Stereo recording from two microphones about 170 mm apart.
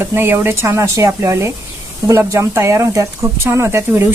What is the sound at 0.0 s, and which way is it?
Speech, 15° right (ahead or behind).